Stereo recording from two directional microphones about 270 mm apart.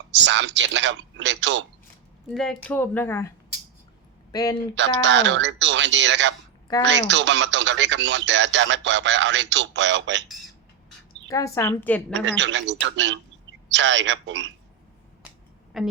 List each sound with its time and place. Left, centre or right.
0.1 s speech: right
2.3 s speech: centre
4.7 s speech: right
11.3 s speech: centre
12.1 s speech: right
15.7 s a woman's voice: centre